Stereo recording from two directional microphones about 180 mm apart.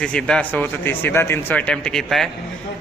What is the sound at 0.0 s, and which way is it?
A man's voice, 5° left (ahead or behind).